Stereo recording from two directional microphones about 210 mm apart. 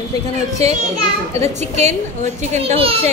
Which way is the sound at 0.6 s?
30° right (ahead or behind).